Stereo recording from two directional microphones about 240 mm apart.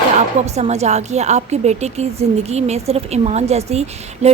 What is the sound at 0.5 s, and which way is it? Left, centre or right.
A woman's voice, right.